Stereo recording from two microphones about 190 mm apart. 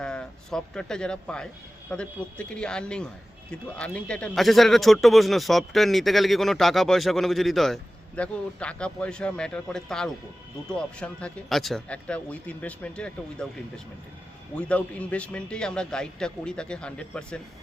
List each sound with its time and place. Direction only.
0.0 s speech: 5° left (ahead or behind)